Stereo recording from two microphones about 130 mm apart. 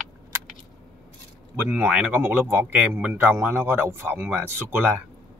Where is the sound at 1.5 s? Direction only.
15° right (ahead or behind).